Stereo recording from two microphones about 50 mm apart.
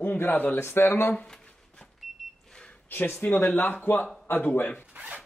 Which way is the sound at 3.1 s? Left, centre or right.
Left.